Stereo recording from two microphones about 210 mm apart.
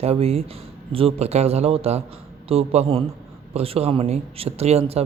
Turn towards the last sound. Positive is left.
turn(degrees=-30)  # may be behind; listen again after turning